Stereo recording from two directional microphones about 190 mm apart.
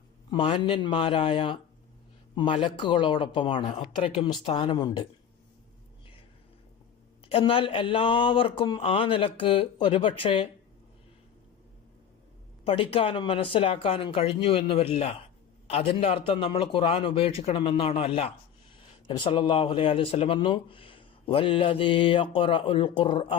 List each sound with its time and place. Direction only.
0.3 s speech: 25° left (ahead or behind)
7.3 s speech: 30° left (ahead or behind)
12.6 s speech: 30° left (ahead or behind)